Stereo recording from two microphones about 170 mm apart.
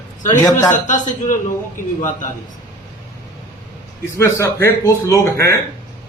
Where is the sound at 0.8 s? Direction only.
45° left (ahead or behind).